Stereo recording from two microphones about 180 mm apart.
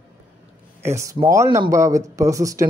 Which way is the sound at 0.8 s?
15° right (ahead or behind).